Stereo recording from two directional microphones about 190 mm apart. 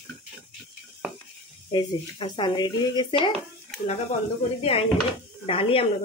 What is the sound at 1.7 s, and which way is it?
Speech, 25° left (ahead or behind).